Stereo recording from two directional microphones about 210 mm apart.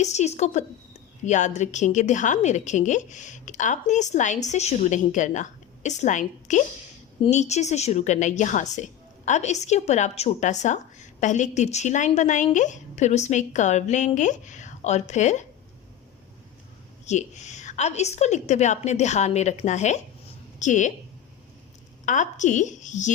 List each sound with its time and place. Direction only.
0.0 s a woman's voice: 35° left (ahead or behind)
17.1 s a woman's voice: 35° left (ahead or behind)
22.0 s a woman's voice: 35° left (ahead or behind)